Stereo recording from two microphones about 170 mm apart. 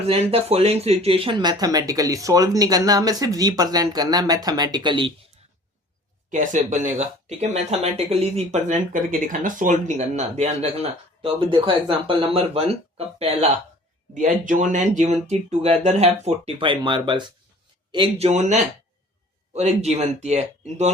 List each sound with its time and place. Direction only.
0.1 s speech: 35° right (ahead or behind)
6.3 s speech: 45° right (ahead or behind)
14.1 s speech: 50° right (ahead or behind)